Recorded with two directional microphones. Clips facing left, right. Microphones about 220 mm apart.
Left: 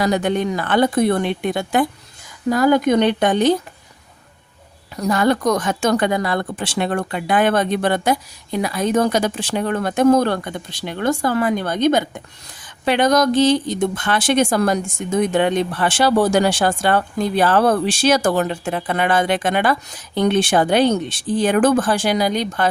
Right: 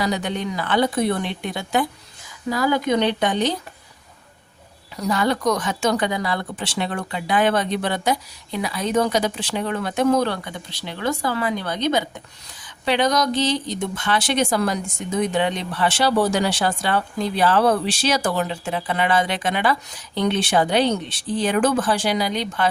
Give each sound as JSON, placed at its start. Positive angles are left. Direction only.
{"t": 0.0, "sound": "speech", "side_deg": 50}
{"t": 4.9, "sound": "speech", "side_deg": 50}